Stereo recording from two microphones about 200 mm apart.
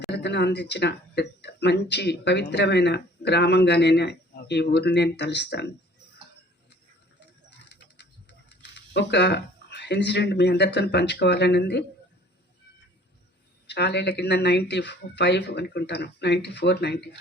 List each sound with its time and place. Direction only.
0.1 s speech: 60° left (ahead or behind)
8.4 s speech: 60° left (ahead or behind)
13.7 s speech: 55° left (ahead or behind)